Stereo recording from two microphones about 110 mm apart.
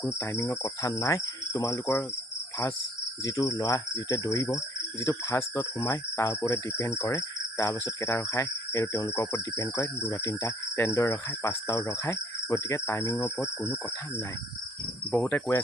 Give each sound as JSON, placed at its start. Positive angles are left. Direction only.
{"t": 0.0, "sound": "speech", "side_deg": 25}
{"t": 3.2, "sound": "speech", "side_deg": 30}
{"t": 15.1, "sound": "cricket", "side_deg": 10}